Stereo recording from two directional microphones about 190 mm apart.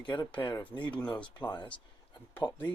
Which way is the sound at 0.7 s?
25° left (ahead or behind).